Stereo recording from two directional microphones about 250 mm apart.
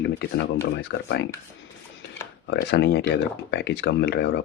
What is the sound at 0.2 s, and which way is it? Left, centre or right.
Speech, left.